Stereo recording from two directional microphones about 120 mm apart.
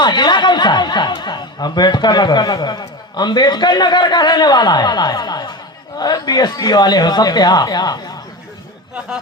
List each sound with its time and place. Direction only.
0.0 s speech: 40° left (ahead or behind)